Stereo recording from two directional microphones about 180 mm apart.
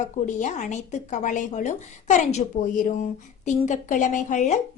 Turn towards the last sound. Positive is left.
turn(degrees=40)  # may be behind; listen again after turning